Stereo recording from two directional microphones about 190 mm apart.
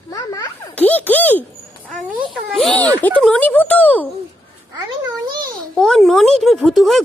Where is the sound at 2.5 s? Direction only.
Centre (ahead or behind).